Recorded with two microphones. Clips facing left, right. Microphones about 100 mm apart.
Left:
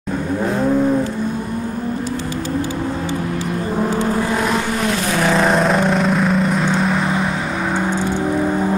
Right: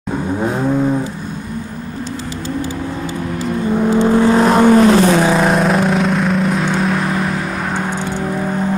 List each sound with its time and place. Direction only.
4.5 s vehicle: 50° right (ahead or behind)
5.2 s vehicle: 5° right (ahead or behind)